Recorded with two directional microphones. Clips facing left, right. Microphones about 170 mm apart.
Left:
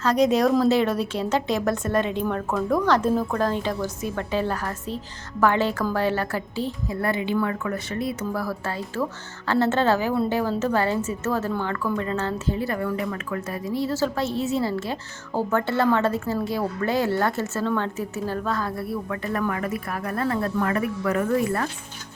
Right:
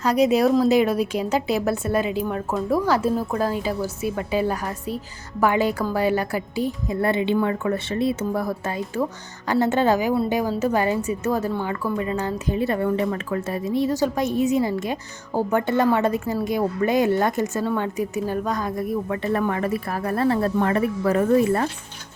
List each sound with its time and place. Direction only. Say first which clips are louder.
0.0 s a woman's voice: right 1 dB; 10° right (ahead or behind); by 21.7 s 25° right (ahead or behind)